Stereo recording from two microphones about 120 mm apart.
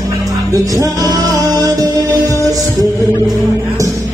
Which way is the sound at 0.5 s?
30° right (ahead or behind).